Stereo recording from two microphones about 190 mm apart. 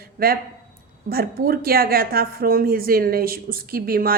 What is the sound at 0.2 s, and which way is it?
Speech, 50° right (ahead or behind).